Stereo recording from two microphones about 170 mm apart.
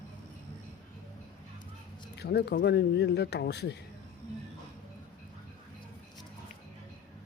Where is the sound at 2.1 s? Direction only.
75° left (ahead or behind).